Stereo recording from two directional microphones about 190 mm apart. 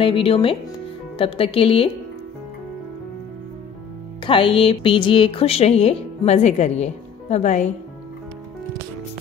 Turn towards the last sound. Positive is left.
turn(degrees=40)  # may be behind; listen again after turning